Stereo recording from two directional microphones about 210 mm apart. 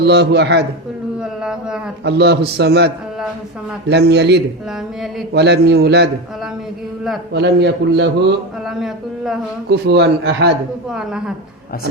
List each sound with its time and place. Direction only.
0.0 s a man's voice: 55° right (ahead or behind)
1.2 s speech: 5° right (ahead or behind)
2.0 s a man's voice: 55° right (ahead or behind)
7.3 s a man's voice: 55° right (ahead or behind)
8.6 s speech: centre (ahead or behind)
9.6 s a man's voice: 50° right (ahead or behind)
10.8 s speech: 5° right (ahead or behind)